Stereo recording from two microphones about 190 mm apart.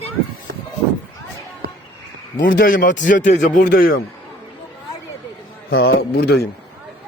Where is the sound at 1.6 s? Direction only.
55° right (ahead or behind).